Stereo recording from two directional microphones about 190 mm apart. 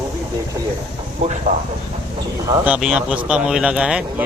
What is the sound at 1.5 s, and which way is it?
Speech, 40° right (ahead or behind).